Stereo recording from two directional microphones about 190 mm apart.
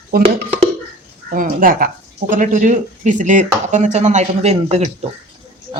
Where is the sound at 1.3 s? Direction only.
45° right (ahead or behind).